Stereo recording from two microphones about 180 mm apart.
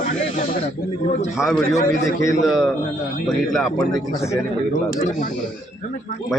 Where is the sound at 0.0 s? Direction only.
50° left (ahead or behind).